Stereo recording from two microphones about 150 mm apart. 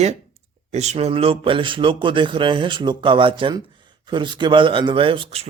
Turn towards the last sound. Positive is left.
turn(degrees=-40)  # may be behind; listen again after turning